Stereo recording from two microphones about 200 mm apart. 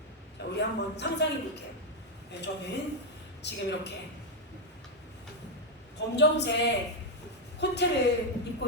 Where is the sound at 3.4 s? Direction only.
60° left (ahead or behind).